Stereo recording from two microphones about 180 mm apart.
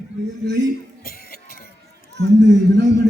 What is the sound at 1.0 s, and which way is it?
Music, 55° left (ahead or behind).